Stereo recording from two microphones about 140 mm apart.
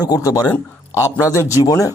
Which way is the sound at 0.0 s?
25° left (ahead or behind).